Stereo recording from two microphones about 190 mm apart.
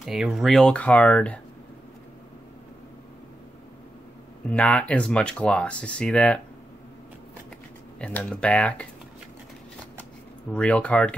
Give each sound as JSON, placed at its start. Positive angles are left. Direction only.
{"t": 0.0, "sound": "speech", "side_deg": 0}
{"t": 4.5, "sound": "speech", "side_deg": 5}
{"t": 8.0, "sound": "speech", "side_deg": 5}
{"t": 10.5, "sound": "speech", "side_deg": 5}